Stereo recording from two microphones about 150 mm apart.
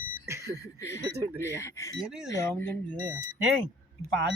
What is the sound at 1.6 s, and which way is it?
Speech, 20° left (ahead or behind).